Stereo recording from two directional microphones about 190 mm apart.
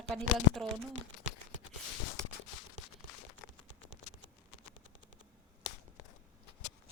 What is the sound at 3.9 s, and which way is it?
Clip-clop, 40° right (ahead or behind).